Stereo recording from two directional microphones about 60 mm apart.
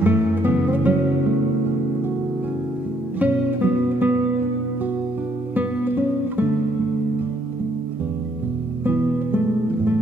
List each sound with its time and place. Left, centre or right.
0.0 s music: right
3.2 s music: right
5.5 s music: right
8.8 s music: right